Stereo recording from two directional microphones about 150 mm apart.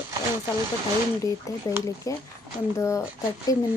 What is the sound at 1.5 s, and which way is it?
Speech, 20° left (ahead or behind).